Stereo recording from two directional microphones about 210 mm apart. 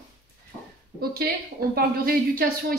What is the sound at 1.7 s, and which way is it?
Speech, 45° right (ahead or behind).